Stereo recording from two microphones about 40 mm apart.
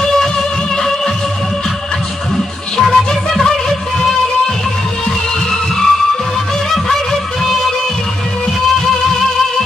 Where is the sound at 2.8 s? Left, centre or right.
Centre.